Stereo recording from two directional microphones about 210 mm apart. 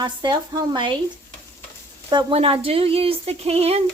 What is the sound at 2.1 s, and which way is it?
Speech, 25° right (ahead or behind).